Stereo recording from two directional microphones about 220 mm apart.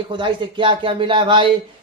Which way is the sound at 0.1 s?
20° right (ahead or behind).